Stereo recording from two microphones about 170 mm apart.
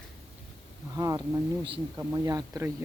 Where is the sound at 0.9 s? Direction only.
20° right (ahead or behind).